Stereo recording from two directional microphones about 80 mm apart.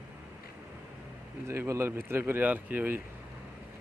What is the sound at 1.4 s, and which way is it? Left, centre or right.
Speech, right.